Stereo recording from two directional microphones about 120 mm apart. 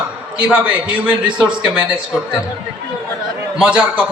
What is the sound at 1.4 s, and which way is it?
Speech, 10° right (ahead or behind).